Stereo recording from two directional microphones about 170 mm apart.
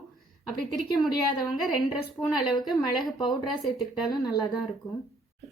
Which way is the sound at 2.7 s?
25° left (ahead or behind).